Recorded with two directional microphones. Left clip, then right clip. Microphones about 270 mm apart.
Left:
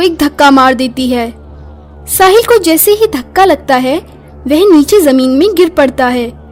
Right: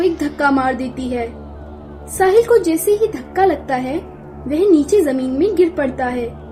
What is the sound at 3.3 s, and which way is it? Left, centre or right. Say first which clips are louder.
Speech: left 9 dB; left.